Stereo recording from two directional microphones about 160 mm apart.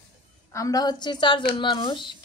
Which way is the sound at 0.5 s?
20° left (ahead or behind).